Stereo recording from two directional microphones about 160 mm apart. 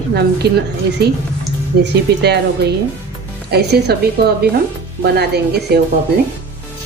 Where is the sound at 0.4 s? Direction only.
90° right.